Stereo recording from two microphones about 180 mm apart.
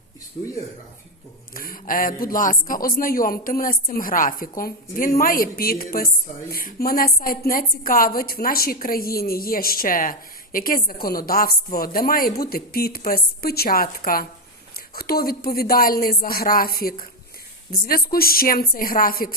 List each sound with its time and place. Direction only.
1.5 s a woman's voice: 50° left (ahead or behind)